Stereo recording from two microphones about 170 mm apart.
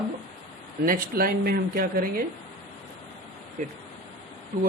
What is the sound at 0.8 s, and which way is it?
Speech, 60° right (ahead or behind).